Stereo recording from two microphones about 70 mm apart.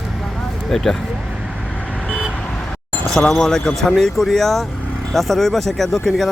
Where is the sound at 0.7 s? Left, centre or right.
Centre.